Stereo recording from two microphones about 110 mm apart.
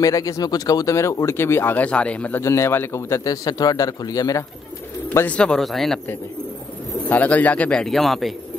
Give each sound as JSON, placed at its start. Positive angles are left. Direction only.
{"t": 0.0, "sound": "speech", "side_deg": 30}
{"t": 2.4, "sound": "a man's voice", "side_deg": 25}
{"t": 5.1, "sound": "a man's voice", "side_deg": 15}
{"t": 7.1, "sound": "a man's voice", "side_deg": 15}